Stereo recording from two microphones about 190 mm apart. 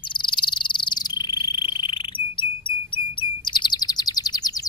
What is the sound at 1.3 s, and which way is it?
Frog, 20° left (ahead or behind).